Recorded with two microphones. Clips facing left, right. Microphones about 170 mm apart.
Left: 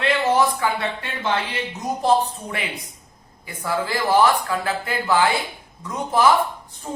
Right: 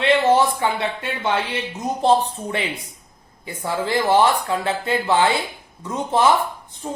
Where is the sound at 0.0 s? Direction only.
25° right (ahead or behind).